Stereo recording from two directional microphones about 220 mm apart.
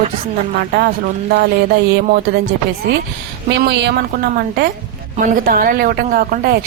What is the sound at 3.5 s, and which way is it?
Speech, 50° right (ahead or behind).